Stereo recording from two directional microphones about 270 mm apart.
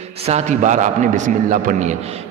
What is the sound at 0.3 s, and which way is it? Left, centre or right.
A man's voice, right.